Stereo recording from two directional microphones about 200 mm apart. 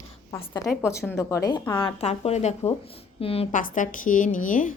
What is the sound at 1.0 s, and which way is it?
A woman's voice, 15° left (ahead or behind).